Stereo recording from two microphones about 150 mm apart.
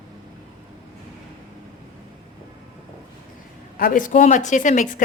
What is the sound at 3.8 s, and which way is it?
A woman's voice, 65° left (ahead or behind).